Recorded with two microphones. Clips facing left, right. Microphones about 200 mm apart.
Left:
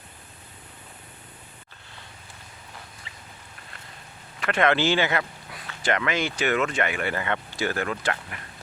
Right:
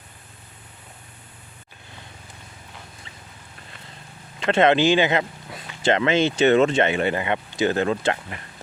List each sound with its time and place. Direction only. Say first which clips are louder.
3.1 s fowl: right 1 dB; centre (ahead or behind)
4.4 s speech: right 5 dB; 25° right (ahead or behind)